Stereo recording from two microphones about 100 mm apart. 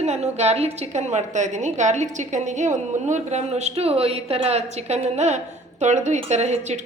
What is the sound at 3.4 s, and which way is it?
A woman's voice, 90° right.